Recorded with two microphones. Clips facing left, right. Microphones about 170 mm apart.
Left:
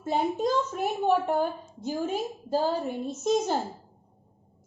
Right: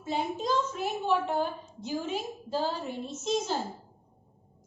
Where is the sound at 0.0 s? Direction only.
50° left (ahead or behind).